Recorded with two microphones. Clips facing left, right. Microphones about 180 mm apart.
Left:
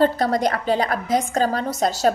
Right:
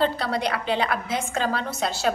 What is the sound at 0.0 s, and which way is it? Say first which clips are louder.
A woman's voice: left 6 dB; 45° left (ahead or behind).